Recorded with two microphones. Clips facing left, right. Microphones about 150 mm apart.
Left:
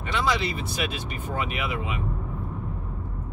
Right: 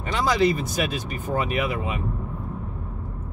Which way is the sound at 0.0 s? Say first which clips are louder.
Right 5 dB; 40° right (ahead or behind).